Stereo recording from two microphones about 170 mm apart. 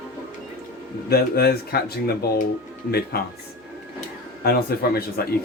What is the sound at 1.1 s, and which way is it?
Speech, 65° left (ahead or behind).